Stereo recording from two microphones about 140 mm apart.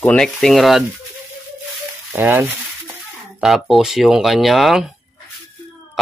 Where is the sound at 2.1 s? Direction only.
15° right (ahead or behind).